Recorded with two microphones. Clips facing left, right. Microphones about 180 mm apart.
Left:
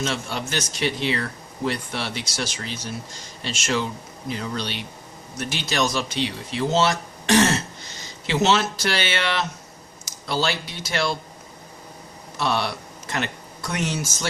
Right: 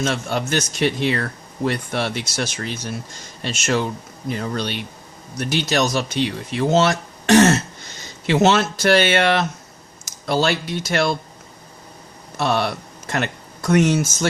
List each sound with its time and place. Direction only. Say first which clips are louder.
0.0 s speech: right 5 dB; 50° right (ahead or behind)
12.4 s speech: right 4 dB; 50° right (ahead or behind)